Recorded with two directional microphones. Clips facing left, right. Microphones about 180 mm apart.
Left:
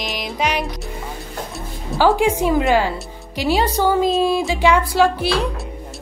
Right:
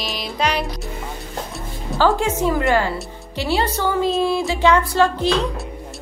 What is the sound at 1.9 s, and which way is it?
A woman's voice, 15° left (ahead or behind).